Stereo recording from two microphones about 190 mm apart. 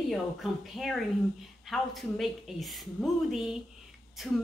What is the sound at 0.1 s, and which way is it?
Speech, centre (ahead or behind).